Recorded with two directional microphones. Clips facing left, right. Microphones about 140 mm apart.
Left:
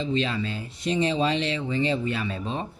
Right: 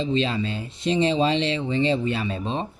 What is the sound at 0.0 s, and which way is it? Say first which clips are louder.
Speech: right 3 dB; 25° right (ahead or behind).